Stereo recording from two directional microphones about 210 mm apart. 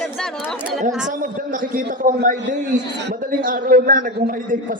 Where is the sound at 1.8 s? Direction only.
40° right (ahead or behind).